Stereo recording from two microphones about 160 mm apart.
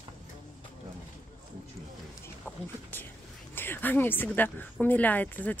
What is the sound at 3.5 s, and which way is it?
A woman's voice, 15° left (ahead or behind).